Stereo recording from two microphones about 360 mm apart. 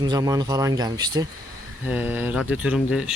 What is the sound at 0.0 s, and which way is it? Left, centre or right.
Speech, centre.